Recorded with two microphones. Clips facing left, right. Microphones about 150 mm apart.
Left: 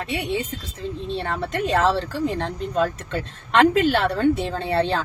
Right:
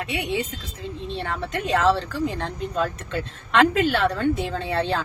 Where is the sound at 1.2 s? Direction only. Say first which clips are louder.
Left 2 dB; 40° left (ahead or behind).